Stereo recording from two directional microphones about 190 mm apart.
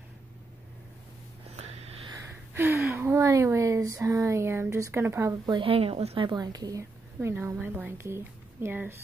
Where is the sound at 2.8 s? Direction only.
10° right (ahead or behind).